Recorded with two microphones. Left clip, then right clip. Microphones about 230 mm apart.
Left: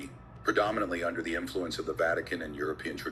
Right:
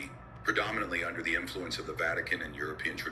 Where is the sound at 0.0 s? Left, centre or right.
Left.